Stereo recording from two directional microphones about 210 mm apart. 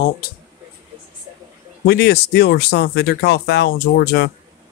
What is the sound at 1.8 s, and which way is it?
Speech, 50° left (ahead or behind).